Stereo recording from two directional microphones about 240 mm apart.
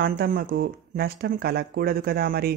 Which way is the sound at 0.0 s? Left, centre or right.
Right.